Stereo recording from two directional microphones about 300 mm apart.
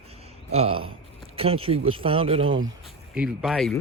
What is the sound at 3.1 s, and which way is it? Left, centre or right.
Speech, centre.